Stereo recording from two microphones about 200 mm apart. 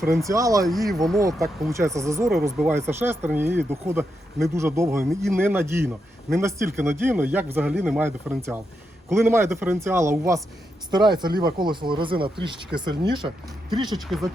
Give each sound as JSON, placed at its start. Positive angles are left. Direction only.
{"t": 0.3, "sound": "speech", "side_deg": -15}
{"t": 0.9, "sound": "speech", "side_deg": 0}
{"t": 1.4, "sound": "speech", "side_deg": -15}
{"t": 14.0, "sound": "speech", "side_deg": 0}